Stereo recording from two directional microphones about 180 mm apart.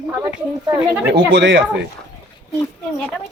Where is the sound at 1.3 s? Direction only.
80° right.